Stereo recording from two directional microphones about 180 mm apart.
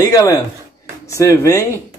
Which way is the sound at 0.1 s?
15° left (ahead or behind).